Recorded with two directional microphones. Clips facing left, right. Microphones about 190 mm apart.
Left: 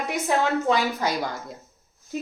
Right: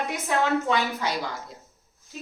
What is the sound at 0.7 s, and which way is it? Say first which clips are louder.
Speech: left 3 dB; 40° left (ahead or behind).